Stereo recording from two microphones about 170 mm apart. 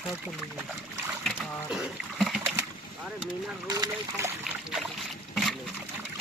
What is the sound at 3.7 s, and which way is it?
Speech, 20° right (ahead or behind).